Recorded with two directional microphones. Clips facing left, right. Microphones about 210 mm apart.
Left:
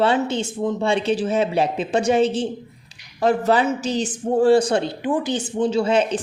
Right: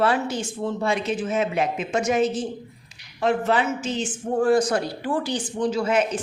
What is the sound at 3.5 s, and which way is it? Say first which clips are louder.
A woman's voice: left 4 dB; 35° left (ahead or behind).